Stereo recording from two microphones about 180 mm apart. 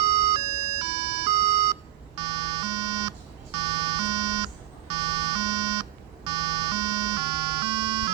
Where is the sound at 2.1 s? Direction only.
25° right (ahead or behind).